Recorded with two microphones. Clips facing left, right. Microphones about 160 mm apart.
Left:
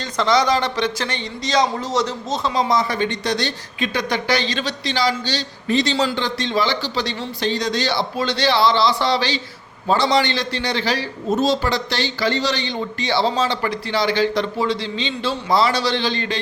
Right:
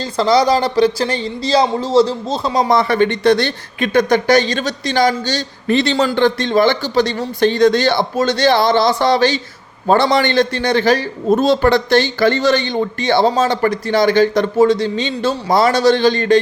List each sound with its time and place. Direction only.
0.0 s speech: 35° right (ahead or behind)
2.6 s speech: 60° right (ahead or behind)